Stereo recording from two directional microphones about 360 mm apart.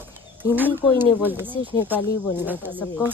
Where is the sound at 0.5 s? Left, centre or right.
Centre.